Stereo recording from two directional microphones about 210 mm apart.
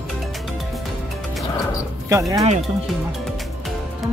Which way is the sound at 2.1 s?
15° right (ahead or behind).